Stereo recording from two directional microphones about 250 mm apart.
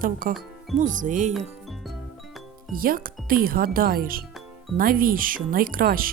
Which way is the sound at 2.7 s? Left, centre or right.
Right.